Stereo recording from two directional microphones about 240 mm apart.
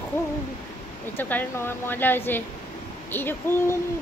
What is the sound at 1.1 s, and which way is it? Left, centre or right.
Speech, centre.